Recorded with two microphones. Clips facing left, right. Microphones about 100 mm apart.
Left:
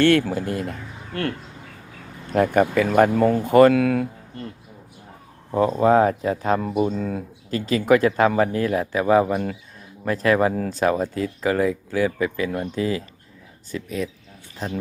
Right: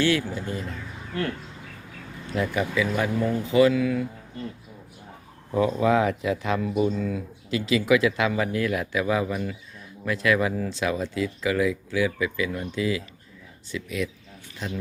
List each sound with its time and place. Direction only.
0.0 s speech: 60° left (ahead or behind)
2.2 s speech: 50° left (ahead or behind)
5.5 s speech: 40° left (ahead or behind)